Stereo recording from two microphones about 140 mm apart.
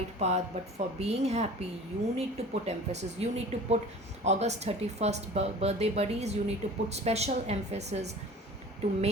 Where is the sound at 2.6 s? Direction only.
50° right (ahead or behind).